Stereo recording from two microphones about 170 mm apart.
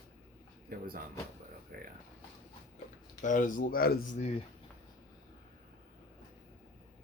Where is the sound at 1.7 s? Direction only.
60° right (ahead or behind).